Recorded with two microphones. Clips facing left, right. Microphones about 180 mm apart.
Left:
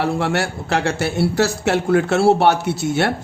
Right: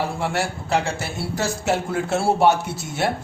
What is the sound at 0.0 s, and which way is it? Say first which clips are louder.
Speech: left 4 dB; 70° left (ahead or behind).